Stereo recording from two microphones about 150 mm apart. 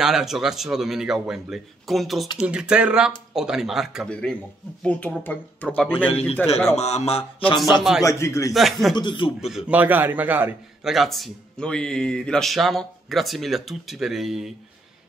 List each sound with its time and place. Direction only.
0.0 s a man's voice: centre (ahead or behind)
6.0 s mantra: 40° left (ahead or behind)
8.0 s a man's voice: 20° left (ahead or behind)
8.5 s a man's voice: centre (ahead or behind)
8.9 s mantra: 35° left (ahead or behind)
9.5 s a man's voice: 5° right (ahead or behind)